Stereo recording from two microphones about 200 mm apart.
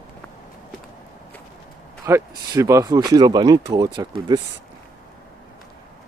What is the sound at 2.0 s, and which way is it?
Speech, 15° right (ahead or behind).